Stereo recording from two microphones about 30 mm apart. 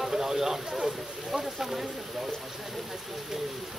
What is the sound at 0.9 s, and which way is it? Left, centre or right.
Speech, centre.